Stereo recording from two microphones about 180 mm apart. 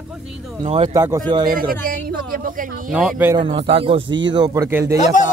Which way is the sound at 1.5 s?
55° right (ahead or behind).